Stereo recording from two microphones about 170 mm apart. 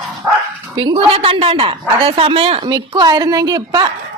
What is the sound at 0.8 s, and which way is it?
A woman's voice, 35° right (ahead or behind).